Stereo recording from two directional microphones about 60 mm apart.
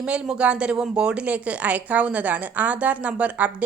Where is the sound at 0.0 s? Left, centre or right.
Centre.